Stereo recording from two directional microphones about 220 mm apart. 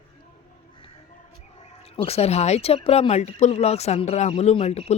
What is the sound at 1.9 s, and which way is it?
Speech, 25° left (ahead or behind).